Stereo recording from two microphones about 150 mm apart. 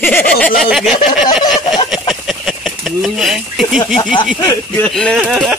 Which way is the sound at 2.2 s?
Centre (ahead or behind).